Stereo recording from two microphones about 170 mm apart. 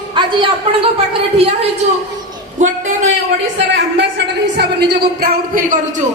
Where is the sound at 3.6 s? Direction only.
90° right; by 5.8 s 60° right (ahead or behind).